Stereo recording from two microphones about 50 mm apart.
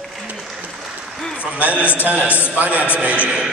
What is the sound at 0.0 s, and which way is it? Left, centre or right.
Applause, centre.